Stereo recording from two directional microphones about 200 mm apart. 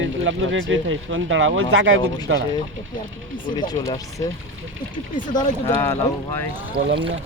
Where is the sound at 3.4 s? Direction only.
25° left (ahead or behind).